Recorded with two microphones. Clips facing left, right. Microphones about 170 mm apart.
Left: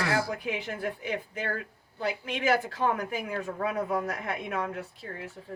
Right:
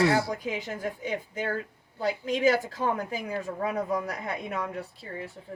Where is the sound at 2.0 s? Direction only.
35° right (ahead or behind).